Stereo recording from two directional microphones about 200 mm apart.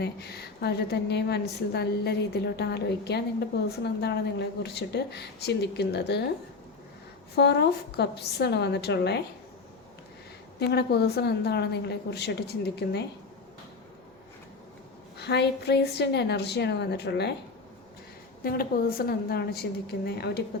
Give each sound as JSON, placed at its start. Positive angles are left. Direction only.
{"t": 0.0, "sound": "a woman's voice", "side_deg": 55}
{"t": 7.3, "sound": "a woman's voice", "side_deg": 55}
{"t": 10.6, "sound": "a woman's voice", "side_deg": 55}
{"t": 15.2, "sound": "a woman's voice", "side_deg": 55}
{"t": 18.4, "sound": "a woman's voice", "side_deg": 45}